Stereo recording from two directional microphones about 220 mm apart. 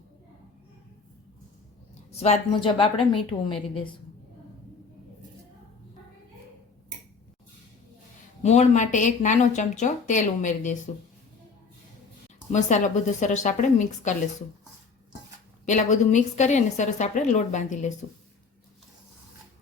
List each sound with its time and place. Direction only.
2.1 s a woman's voice: 30° left (ahead or behind)
8.4 s speech: 30° left (ahead or behind)
12.5 s speech: 30° left (ahead or behind)
15.6 s speech: 35° left (ahead or behind)